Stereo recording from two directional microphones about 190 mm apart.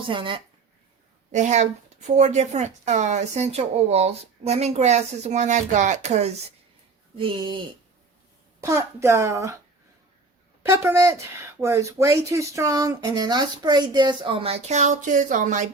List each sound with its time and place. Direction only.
0.1 s speech: 25° right (ahead or behind)
1.3 s speech: 40° right (ahead or behind)
8.6 s a woman's voice: 15° right (ahead or behind)
10.7 s speech: 15° right (ahead or behind); by 15.7 s 40° right (ahead or behind)